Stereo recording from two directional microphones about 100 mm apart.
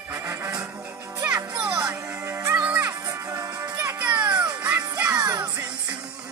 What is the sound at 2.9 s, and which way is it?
Music, 35° right (ahead or behind).